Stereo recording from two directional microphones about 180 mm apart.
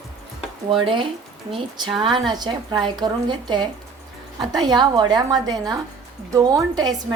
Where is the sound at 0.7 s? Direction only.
30° right (ahead or behind).